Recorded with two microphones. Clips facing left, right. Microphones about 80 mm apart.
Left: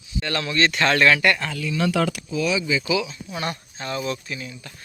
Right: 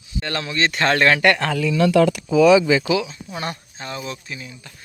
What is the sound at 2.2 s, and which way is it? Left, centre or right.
Speech, right.